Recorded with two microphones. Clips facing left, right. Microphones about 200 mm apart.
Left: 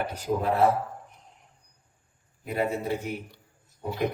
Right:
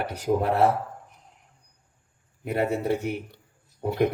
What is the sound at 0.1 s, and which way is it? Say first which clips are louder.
Speech: right 3 dB; 65° right (ahead or behind).